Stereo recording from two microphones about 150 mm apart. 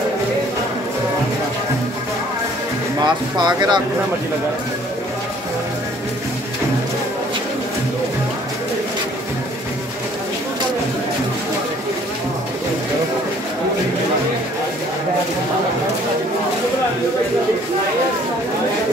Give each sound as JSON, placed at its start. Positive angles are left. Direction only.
{"t": 3.0, "sound": "speech", "side_deg": -30}